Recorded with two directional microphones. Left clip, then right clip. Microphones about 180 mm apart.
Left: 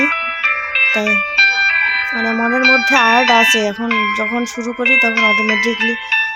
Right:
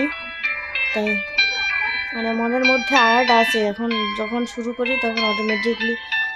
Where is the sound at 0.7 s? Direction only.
30° left (ahead or behind).